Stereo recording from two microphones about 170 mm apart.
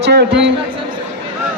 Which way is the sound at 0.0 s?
80° right.